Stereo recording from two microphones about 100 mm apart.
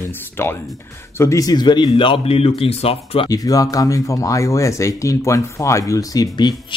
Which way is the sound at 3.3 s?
35° left (ahead or behind).